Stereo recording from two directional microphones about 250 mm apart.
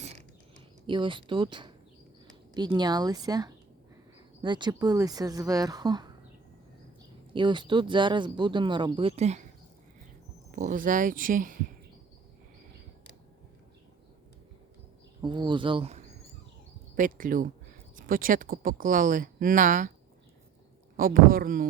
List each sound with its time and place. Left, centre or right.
0.9 s speech: centre
7.3 s speech: centre
10.5 s speech: right
15.2 s speech: centre
20.9 s speech: right